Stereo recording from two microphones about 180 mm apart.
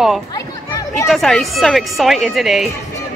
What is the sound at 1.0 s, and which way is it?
Speech, centre (ahead or behind).